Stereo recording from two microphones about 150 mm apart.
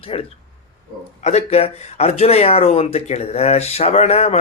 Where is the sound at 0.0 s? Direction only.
40° left (ahead or behind).